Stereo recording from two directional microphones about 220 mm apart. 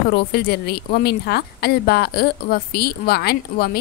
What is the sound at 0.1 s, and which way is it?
A woman's voice, 45° left (ahead or behind).